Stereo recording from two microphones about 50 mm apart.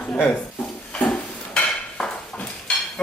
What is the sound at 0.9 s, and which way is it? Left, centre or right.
Dishes, centre.